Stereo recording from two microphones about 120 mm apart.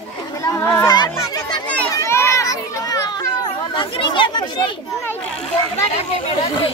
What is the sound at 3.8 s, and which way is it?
Chatter, 45° left (ahead or behind).